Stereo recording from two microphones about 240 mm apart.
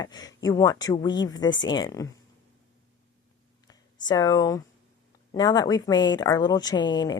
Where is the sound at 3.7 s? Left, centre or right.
Centre.